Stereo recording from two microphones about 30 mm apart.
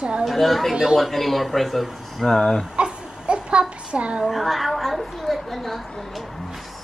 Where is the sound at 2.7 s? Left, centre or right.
Right.